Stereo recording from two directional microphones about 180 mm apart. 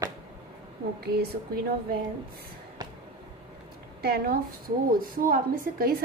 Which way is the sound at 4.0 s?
60° right (ahead or behind).